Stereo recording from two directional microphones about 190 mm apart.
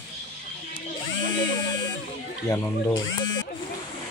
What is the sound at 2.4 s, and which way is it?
Speech, 20° left (ahead or behind).